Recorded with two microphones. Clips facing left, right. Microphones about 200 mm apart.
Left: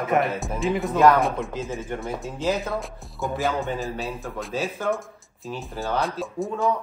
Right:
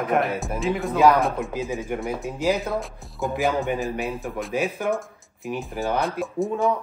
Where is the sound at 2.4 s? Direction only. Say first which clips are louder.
Right 2 dB; 10° right (ahead or behind).